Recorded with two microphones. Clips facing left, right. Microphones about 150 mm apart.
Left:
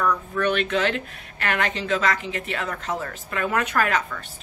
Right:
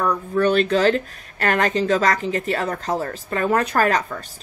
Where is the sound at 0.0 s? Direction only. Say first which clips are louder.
Right 4 dB; 35° right (ahead or behind).